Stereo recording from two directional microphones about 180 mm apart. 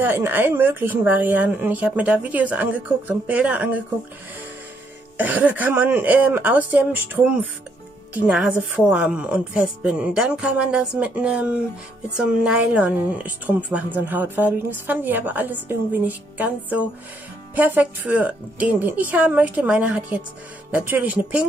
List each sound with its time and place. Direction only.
0.0 s a woman's voice: 10° right (ahead or behind)
5.1 s a woman's voice: 10° right (ahead or behind)